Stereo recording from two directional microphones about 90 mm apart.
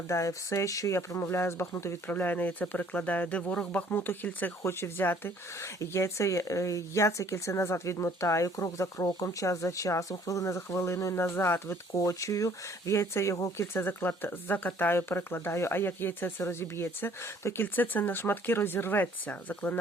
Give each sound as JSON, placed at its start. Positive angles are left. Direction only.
{"t": 0.1, "sound": "speech", "side_deg": 35}